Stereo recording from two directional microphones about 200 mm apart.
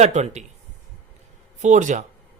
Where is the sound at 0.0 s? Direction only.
35° right (ahead or behind).